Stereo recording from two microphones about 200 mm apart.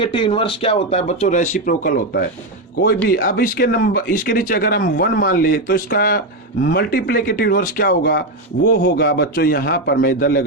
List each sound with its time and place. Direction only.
0.0 s speech: 25° left (ahead or behind); by 10.4 s 45° left (ahead or behind)